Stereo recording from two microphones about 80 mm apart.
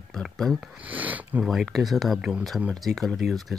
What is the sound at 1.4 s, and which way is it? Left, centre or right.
Speech, centre.